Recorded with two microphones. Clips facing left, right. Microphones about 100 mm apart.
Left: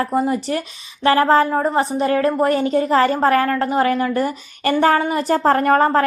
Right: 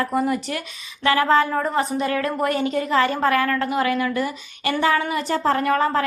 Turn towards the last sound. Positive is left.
turn(degrees=45)  # may be behind; listen again after turning